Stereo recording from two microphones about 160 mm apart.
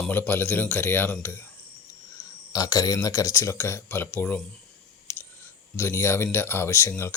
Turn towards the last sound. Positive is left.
turn(degrees=15)  # may be behind; listen again after turning